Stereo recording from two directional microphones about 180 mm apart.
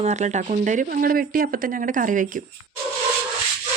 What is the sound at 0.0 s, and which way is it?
Speech, 40° right (ahead or behind).